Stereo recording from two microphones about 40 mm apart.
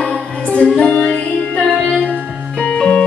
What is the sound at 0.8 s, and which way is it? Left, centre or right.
Music, left.